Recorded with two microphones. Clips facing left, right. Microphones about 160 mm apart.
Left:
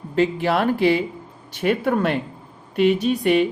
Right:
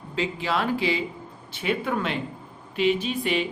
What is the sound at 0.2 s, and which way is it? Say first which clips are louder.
Speech: left 7 dB; 55° left (ahead or behind).